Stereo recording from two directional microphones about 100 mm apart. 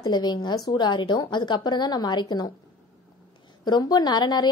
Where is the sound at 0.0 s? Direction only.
45° left (ahead or behind).